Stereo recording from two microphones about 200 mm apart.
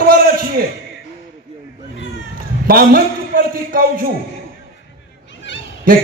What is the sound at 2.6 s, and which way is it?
A man's voice, 45° right (ahead or behind).